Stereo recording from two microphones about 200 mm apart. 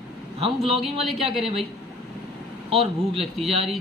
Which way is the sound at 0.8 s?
Centre (ahead or behind).